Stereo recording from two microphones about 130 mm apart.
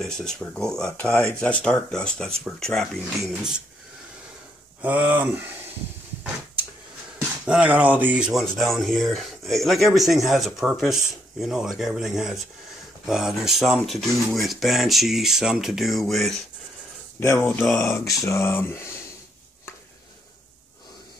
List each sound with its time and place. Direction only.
0.0 s speech: 5° left (ahead or behind)
4.8 s speech: 10° right (ahead or behind)
7.4 s speech: 10° right (ahead or behind)
17.2 s speech: 20° left (ahead or behind)
17.5 s speech: 5° left (ahead or behind)
17.7 s speech: 20° left (ahead or behind)